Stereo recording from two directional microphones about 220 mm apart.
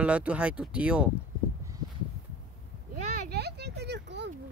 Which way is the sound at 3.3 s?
50° right (ahead or behind).